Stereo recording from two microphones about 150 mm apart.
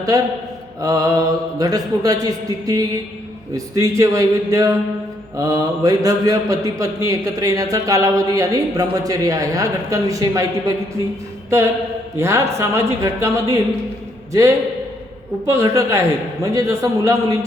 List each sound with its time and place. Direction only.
0.1 s a man's voice: 20° right (ahead or behind)
12.1 s a man's voice: 20° right (ahead or behind)
15.4 s a man's voice: 20° right (ahead or behind)